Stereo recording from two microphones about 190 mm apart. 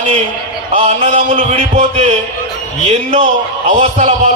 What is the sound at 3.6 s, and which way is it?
Speech, 30° right (ahead or behind).